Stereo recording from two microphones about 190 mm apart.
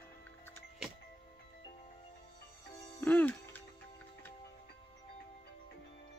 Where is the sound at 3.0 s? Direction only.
10° left (ahead or behind).